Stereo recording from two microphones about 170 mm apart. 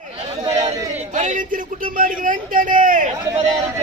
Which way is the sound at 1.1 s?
45° right (ahead or behind).